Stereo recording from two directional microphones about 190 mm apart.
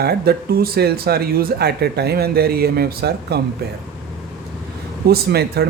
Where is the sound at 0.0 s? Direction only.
55° right (ahead or behind).